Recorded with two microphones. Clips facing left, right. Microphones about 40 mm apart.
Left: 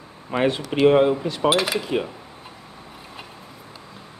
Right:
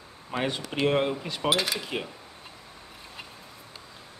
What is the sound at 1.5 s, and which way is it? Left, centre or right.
Speech, centre.